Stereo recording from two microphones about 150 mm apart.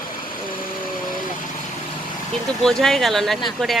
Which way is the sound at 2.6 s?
Centre (ahead or behind).